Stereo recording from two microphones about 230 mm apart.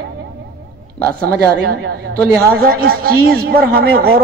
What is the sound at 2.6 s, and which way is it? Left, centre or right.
A man's voice, right.